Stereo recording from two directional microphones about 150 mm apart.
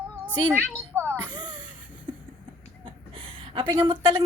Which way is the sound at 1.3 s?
30° right (ahead or behind).